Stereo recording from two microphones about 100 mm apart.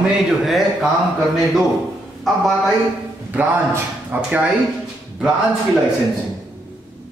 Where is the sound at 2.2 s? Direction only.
Centre (ahead or behind).